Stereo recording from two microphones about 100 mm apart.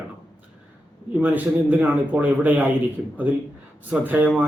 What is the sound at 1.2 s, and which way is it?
A man's voice, 15° right (ahead or behind).